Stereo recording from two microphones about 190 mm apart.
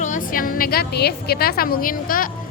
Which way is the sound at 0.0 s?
45° left (ahead or behind).